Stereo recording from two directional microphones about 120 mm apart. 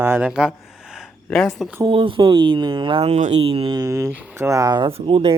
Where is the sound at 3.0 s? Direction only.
65° right (ahead or behind).